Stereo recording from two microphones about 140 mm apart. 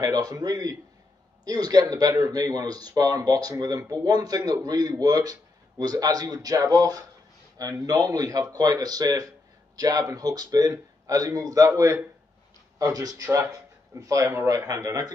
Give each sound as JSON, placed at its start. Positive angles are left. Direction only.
{"t": 0.0, "sound": "a man's voice", "side_deg": -30}